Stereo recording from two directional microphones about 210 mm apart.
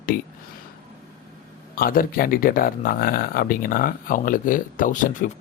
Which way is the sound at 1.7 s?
45° left (ahead or behind).